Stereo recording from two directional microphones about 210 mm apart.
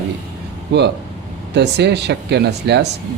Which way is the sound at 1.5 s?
55° right (ahead or behind).